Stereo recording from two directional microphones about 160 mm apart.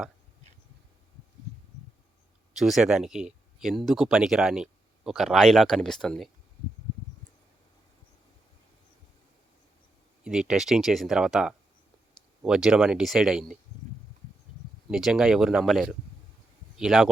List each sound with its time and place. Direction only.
2.6 s speech: centre (ahead or behind)
10.2 s speech: 5° right (ahead or behind)
14.8 s speech: 5° right (ahead or behind)